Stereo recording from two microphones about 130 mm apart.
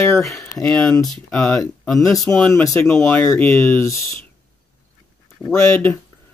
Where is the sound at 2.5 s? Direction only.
25° left (ahead or behind).